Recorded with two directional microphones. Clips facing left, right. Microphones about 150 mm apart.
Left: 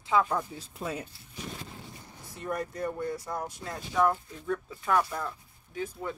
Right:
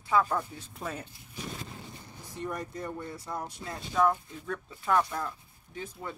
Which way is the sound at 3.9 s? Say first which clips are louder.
Even; 5° left (ahead or behind).